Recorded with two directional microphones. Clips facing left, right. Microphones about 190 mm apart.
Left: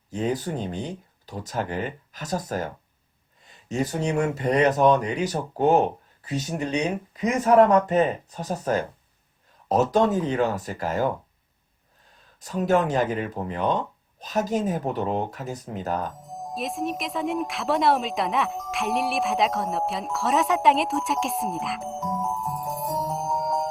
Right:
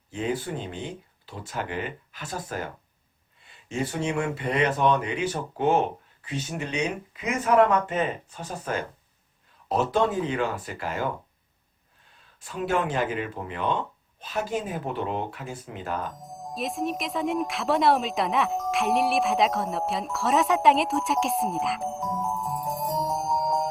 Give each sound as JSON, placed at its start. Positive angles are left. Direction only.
{"t": 0.1, "sound": "speech", "side_deg": 40}
{"t": 12.4, "sound": "speech", "side_deg": 40}
{"t": 16.6, "sound": "speech", "side_deg": 0}